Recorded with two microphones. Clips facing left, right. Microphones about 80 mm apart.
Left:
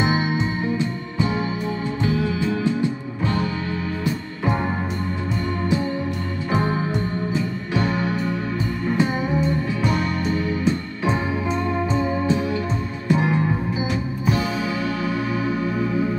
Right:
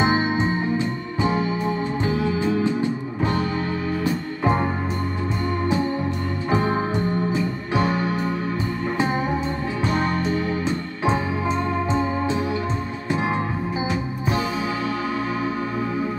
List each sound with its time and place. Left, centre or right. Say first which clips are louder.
0.0 s music: right 1 dB; right
7.7 s music: right 1 dB; right
13.1 s music: left 3 dB; right